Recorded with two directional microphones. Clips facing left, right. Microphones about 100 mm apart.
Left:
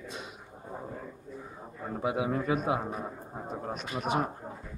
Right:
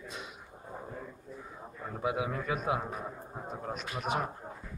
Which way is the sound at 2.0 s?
30° left (ahead or behind).